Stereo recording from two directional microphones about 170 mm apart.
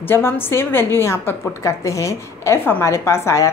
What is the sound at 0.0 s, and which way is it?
A woman's voice, 15° left (ahead or behind).